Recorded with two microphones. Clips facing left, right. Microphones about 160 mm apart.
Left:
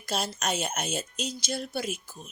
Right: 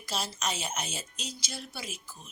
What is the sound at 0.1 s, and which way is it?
A woman's voice, 50° left (ahead or behind).